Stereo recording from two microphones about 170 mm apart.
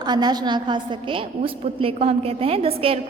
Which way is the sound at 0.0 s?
25° right (ahead or behind).